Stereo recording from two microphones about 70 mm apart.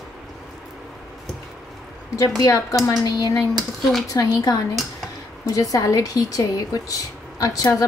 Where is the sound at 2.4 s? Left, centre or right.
Left.